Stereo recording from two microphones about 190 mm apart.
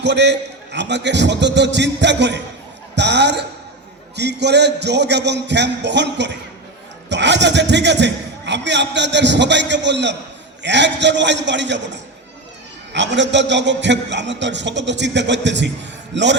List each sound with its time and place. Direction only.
0.0 s a man's voice: 65° right (ahead or behind)
12.9 s a man's voice: 70° right (ahead or behind)